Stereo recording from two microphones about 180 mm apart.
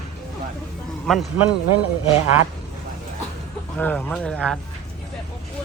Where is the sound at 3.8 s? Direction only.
10° left (ahead or behind).